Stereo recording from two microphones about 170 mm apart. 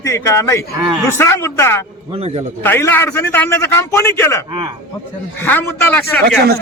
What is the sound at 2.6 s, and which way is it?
A man's voice, 15° left (ahead or behind).